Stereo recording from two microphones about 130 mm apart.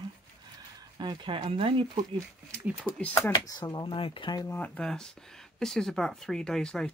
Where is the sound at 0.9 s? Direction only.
35° right (ahead or behind).